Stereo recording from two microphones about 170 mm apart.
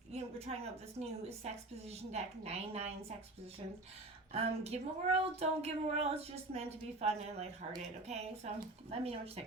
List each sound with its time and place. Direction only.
0.1 s a woman's voice: 40° right (ahead or behind)
4.3 s speech: 40° right (ahead or behind)